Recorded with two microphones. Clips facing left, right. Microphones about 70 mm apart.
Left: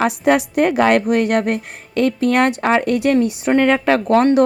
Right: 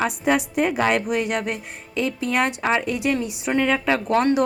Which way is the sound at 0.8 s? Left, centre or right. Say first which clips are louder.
Left 7 dB; left.